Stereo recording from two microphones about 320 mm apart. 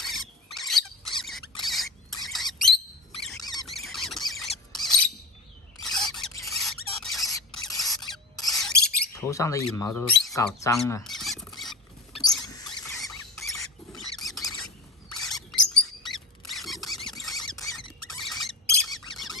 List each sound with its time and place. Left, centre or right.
0.0 s rodents: centre
3.2 s a sound: centre
5.8 s squeal: centre
8.4 s mouse: centre
8.8 s mouse: left
9.1 s speech: centre
12.2 s rodents: centre
15.2 s squeak: centre
17.3 s rodents: centre
18.8 s squeak: centre